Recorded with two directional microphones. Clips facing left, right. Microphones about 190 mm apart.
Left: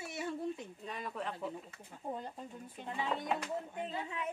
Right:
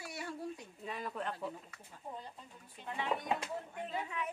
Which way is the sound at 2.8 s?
50° left (ahead or behind).